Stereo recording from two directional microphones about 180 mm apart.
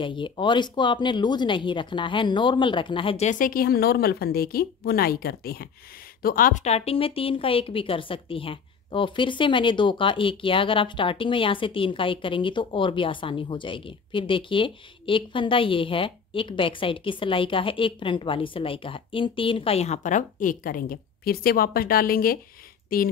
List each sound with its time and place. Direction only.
0.0 s a woman's voice: 25° left (ahead or behind); by 23.1 s 55° left (ahead or behind)